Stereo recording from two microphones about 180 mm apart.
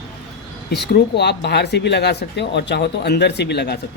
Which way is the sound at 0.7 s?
70° left (ahead or behind).